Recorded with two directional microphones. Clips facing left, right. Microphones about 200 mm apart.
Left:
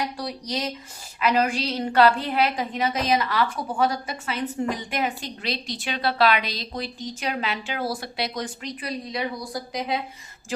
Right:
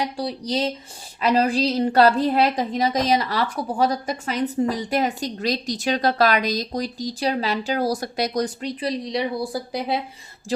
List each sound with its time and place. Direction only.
0.2 s a woman's voice: 30° right (ahead or behind)